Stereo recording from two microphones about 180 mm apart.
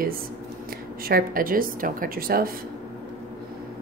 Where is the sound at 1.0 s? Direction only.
55° right (ahead or behind).